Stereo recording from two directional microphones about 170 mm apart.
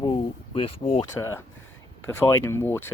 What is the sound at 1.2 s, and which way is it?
Speech, 15° left (ahead or behind).